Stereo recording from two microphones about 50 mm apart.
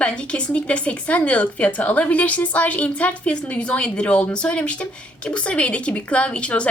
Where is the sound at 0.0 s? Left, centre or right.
Left.